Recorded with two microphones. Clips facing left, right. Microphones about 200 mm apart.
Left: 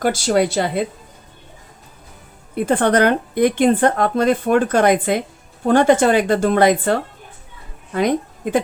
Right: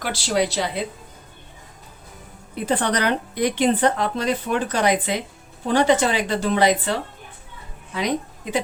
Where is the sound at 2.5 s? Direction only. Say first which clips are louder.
Left 6 dB; 50° left (ahead or behind).